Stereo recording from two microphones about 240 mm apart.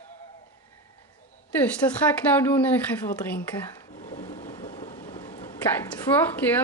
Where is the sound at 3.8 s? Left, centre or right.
Centre.